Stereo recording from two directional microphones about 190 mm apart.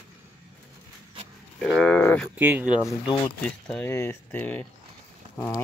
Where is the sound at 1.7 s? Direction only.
5° left (ahead or behind).